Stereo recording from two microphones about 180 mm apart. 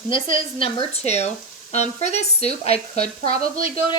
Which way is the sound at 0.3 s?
30° left (ahead or behind).